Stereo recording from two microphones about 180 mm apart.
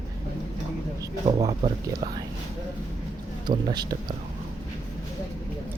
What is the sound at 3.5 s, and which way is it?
Speech, 25° right (ahead or behind).